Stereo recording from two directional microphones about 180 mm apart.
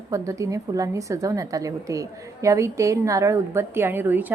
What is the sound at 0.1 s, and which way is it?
A woman's voice, 15° right (ahead or behind).